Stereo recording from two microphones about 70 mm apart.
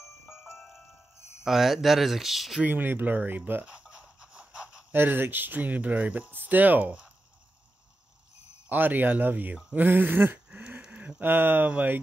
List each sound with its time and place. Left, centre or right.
1.4 s speech: centre
2.6 s speech: right
3.6 s a sound: centre
4.9 s speech: right
8.6 s speech: right